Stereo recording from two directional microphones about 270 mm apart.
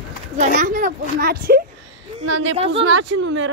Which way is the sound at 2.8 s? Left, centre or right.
Right.